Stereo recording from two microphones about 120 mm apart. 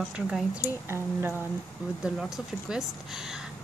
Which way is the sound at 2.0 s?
5° right (ahead or behind).